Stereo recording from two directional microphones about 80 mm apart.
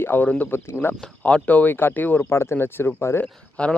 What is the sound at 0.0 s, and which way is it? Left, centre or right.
Speech, left.